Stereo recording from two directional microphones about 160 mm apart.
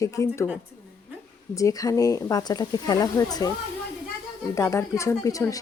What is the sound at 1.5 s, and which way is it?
Speech, 20° left (ahead or behind).